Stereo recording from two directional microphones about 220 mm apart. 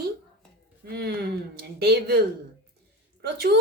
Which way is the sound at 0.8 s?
45° right (ahead or behind).